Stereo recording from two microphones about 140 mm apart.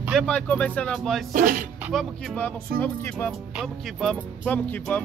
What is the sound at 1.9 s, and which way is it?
Speech, centre (ahead or behind).